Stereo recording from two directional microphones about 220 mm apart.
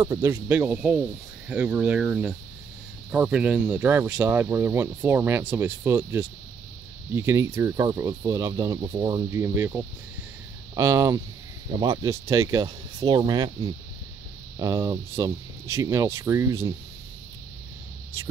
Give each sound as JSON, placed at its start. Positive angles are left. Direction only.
{"t": 0.0, "sound": "speech", "side_deg": -15}
{"t": 14.6, "sound": "speech", "side_deg": -15}